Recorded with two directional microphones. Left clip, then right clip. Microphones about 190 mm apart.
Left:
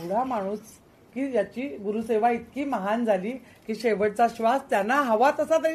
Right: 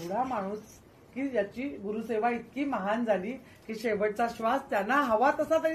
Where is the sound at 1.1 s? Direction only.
40° left (ahead or behind).